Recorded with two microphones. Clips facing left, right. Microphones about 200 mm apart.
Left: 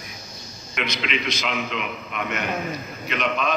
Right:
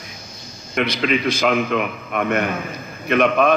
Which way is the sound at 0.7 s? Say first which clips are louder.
Right 8 dB; 50° right (ahead or behind).